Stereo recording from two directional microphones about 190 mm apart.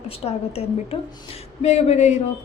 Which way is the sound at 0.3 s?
30° left (ahead or behind).